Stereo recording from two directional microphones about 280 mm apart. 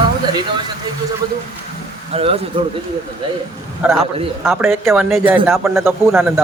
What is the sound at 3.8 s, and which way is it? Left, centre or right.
A man's voice, centre.